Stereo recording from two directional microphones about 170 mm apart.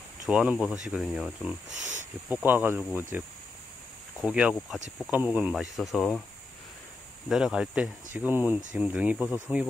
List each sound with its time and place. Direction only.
0.3 s speech: 5° right (ahead or behind)
1.7 s speech: 45° right (ahead or behind)
2.2 s speech: 10° right (ahead or behind)
7.2 s speech: 5° right (ahead or behind)